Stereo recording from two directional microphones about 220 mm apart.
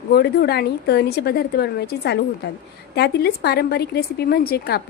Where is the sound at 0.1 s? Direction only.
45° left (ahead or behind).